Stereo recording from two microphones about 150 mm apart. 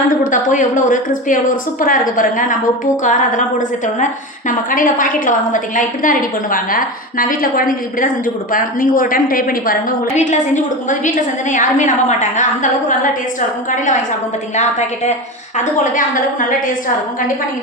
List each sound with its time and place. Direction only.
0.1 s a woman's voice: 60° left (ahead or behind)
10.2 s a woman's voice: 55° left (ahead or behind)
13.7 s a woman's voice: 60° left (ahead or behind)
15.5 s a woman's voice: 60° left (ahead or behind)